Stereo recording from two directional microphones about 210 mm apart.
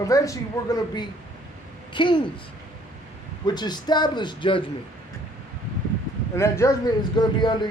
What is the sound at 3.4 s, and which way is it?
Speech, 20° left (ahead or behind).